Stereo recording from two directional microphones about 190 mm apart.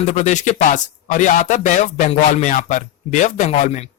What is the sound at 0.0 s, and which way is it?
Speech, 35° left (ahead or behind).